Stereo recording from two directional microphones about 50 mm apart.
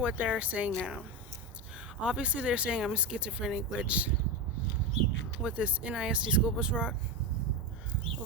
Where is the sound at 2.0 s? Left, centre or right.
Right.